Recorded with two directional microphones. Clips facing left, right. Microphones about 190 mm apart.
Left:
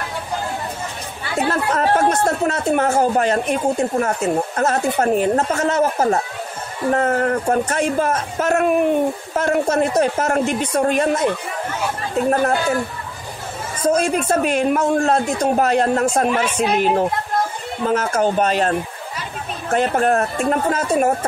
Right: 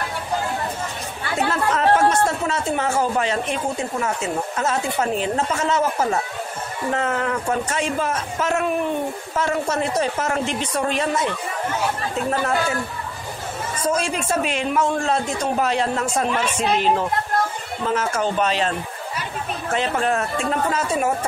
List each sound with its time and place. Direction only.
1.5 s speech: 45° left (ahead or behind)
12.3 s speech: 50° left (ahead or behind)
13.8 s speech: 50° left (ahead or behind)
17.8 s speech: 50° left (ahead or behind)